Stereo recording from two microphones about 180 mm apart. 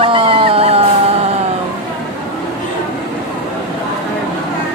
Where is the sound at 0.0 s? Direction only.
30° right (ahead or behind).